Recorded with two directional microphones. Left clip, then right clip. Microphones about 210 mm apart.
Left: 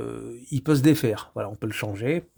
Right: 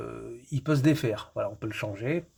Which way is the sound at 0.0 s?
55° left (ahead or behind).